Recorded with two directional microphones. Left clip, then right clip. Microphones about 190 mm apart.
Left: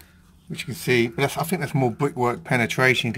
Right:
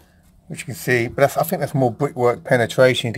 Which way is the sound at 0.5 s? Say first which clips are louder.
Right 2 dB; 20° right (ahead or behind).